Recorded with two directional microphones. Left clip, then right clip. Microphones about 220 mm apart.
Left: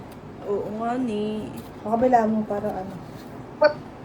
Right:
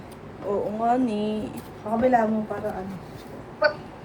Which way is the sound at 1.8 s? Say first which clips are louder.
Left 3 dB; 40° left (ahead or behind).